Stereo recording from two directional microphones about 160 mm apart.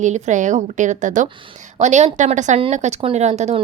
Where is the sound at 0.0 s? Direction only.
50° right (ahead or behind).